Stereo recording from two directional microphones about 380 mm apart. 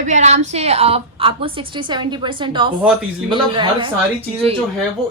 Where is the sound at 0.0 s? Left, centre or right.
Centre.